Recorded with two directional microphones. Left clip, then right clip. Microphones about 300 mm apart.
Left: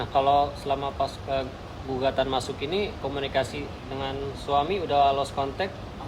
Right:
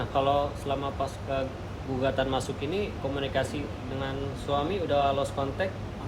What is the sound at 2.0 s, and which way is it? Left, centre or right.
Speech, left.